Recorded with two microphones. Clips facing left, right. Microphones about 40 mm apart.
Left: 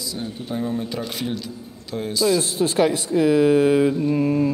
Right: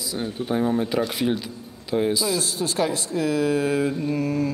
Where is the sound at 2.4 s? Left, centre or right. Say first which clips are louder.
Left 5 dB; left.